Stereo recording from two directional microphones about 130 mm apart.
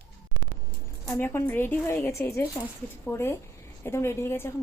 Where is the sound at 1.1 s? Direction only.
15° left (ahead or behind).